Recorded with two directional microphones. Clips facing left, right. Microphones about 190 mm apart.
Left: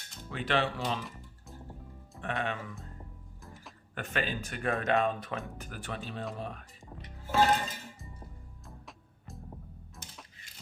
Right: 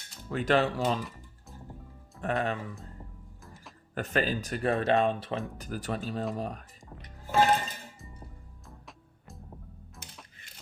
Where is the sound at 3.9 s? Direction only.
40° right (ahead or behind).